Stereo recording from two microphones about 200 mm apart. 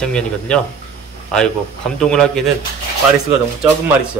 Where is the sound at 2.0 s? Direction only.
5° left (ahead or behind).